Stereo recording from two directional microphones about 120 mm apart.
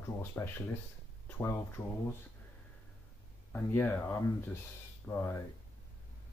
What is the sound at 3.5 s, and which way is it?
Speech, 15° left (ahead or behind).